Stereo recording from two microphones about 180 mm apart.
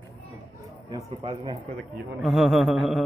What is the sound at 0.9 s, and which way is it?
Speech, 20° right (ahead or behind).